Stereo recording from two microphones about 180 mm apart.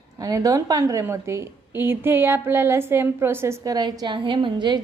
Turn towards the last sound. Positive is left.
turn(degrees=-25)  # may be behind; listen again after turning